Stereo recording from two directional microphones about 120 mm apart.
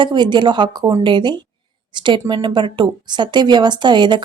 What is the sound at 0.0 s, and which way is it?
A woman's voice, 40° right (ahead or behind).